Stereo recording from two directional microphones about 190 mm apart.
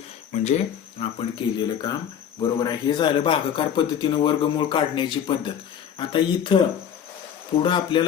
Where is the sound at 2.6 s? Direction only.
20° left (ahead or behind).